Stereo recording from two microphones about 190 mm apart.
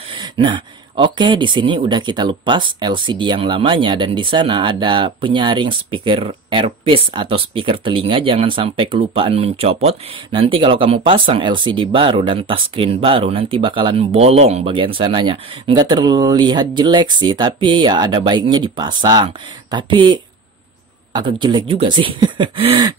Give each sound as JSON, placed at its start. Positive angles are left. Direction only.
{"t": 0.1, "sound": "speech", "side_deg": -25}